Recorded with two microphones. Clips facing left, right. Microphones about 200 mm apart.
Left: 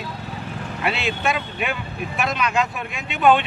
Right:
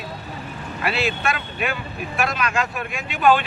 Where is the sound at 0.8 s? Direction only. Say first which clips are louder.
Even; 20° left (ahead or behind).